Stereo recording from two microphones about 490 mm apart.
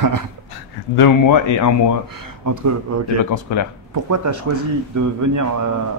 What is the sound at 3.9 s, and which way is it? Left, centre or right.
Speech, right.